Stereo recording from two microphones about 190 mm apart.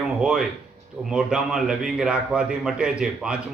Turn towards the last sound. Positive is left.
turn(degrees=-5)  # may be behind; listen again after turning